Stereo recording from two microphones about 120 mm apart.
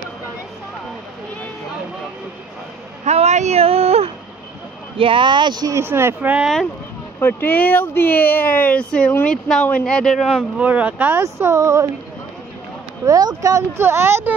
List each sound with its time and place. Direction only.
3.1 s speech: 65° right (ahead or behind)
4.9 s speech: 45° right (ahead or behind); by 6.3 s 20° right (ahead or behind)
7.2 s speech: 15° left (ahead or behind)
10.6 s speech: 10° right (ahead or behind)
11.3 s speech: 25° right (ahead or behind)
13.0 s speech: 30° right (ahead or behind)